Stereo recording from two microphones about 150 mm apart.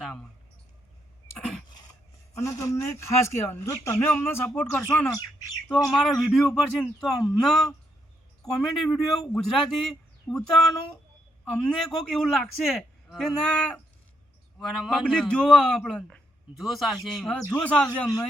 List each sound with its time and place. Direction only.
2.4 s speech: 20° left (ahead or behind)
5.9 s a man's voice: centre (ahead or behind)
11.5 s a man's voice: 5° left (ahead or behind)
17.4 s speech: 20° left (ahead or behind)